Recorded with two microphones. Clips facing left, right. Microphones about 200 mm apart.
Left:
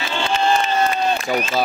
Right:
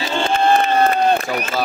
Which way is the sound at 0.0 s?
45° right (ahead or behind).